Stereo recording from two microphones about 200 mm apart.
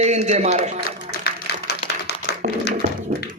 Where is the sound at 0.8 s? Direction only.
55° left (ahead or behind).